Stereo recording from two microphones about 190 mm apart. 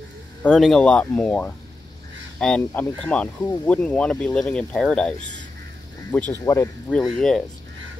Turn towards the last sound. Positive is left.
turn(degrees=5)  # may be behind; listen again after turning